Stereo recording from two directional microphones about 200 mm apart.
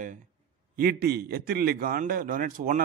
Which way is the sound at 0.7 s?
50° right (ahead or behind).